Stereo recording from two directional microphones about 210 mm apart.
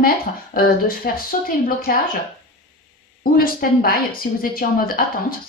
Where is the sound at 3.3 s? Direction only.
45° left (ahead or behind).